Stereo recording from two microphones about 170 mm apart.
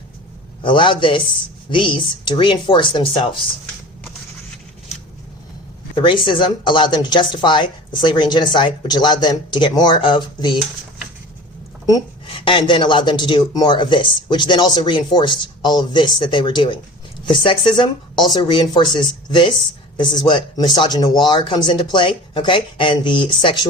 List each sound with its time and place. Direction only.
0.6 s speech: 30° left (ahead or behind)
5.9 s speech: 30° left (ahead or behind)
11.9 s speech: 25° left (ahead or behind)